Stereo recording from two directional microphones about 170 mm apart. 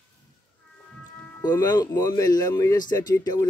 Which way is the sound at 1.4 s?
25° left (ahead or behind).